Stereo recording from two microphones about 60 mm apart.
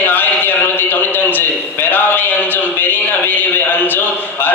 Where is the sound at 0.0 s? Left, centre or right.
Left.